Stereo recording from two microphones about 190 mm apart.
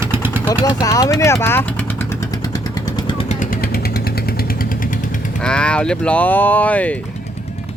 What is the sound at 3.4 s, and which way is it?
Vehicle, 50° left (ahead or behind).